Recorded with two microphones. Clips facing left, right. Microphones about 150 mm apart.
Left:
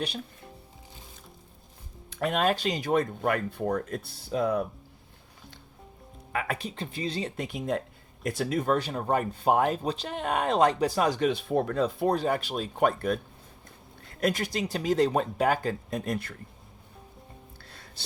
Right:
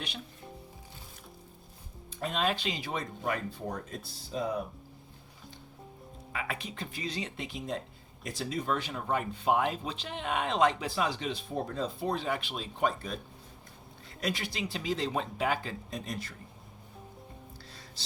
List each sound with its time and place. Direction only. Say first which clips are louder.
2.0 s music: left 7 dB; 70° left (ahead or behind)
2.4 s speech: left 4 dB; 45° left (ahead or behind); by 4.6 s 65° left (ahead or behind)
6.3 s speech: left 6 dB; 50° left (ahead or behind)
6.6 s speech: left 5 dB; 30° left (ahead or behind)
7.4 s speech: left 6 dB; 55° left (ahead or behind)
12.1 s speech: left 6 dB; 45° left (ahead or behind); by 13.1 s 60° left (ahead or behind)
14.2 s speech: left 7 dB; 50° left (ahead or behind)